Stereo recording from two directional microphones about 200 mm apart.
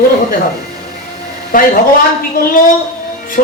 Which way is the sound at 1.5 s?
45° left (ahead or behind).